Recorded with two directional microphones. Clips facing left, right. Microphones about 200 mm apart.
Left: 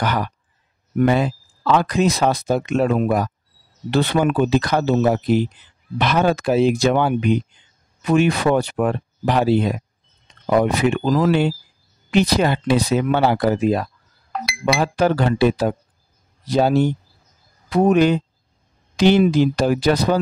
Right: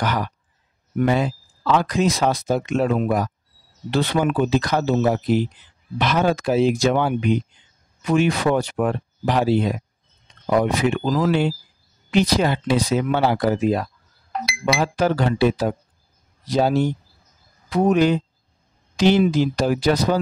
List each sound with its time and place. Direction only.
1.0 s speech: 60° left (ahead or behind)